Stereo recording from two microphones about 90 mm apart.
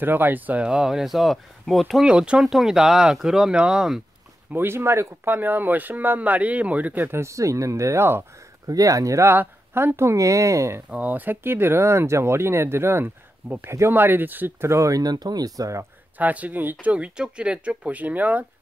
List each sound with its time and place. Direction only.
0.0 s speech: 20° right (ahead or behind); by 2.0 s centre (ahead or behind)
2.0 s speech: 10° right (ahead or behind)
4.5 s speech: 25° right (ahead or behind)
8.6 s speech: 40° right (ahead or behind)
10.9 s speech: 15° right (ahead or behind); by 15.9 s 40° right (ahead or behind)
16.2 s speech: 20° right (ahead or behind)